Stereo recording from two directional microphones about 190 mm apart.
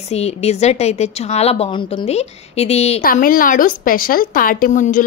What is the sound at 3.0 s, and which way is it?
A woman's voice, 50° left (ahead or behind).